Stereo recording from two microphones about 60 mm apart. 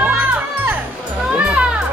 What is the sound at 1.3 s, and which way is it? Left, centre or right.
Music, right.